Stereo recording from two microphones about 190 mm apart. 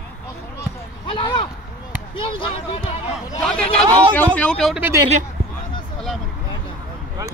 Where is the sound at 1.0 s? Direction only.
25° left (ahead or behind).